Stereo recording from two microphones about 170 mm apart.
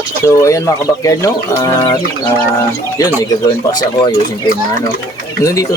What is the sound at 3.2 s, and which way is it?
Speech, 20° left (ahead or behind).